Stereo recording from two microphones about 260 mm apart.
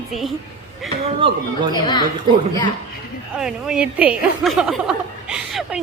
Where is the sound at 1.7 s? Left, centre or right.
Centre.